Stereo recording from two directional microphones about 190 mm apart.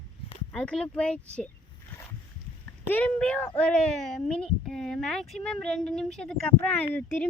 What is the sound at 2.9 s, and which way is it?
Speech, 10° left (ahead or behind).